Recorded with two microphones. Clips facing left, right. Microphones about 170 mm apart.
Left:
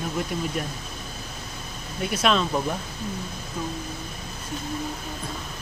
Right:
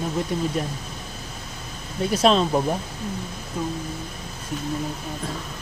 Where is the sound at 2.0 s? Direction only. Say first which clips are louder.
Right 4 dB; 35° right (ahead or behind).